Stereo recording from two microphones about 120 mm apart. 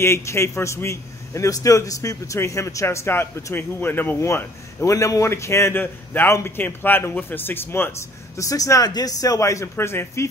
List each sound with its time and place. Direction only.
0.0 s a man's voice: 20° left (ahead or behind)